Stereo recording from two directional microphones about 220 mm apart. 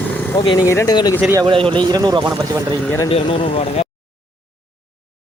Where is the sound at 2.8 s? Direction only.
10° left (ahead or behind).